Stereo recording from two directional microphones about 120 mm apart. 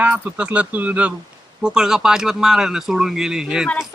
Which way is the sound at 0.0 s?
10° right (ahead or behind).